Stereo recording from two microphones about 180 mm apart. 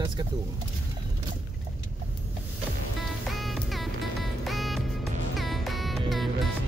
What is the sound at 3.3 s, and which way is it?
Music, centre (ahead or behind).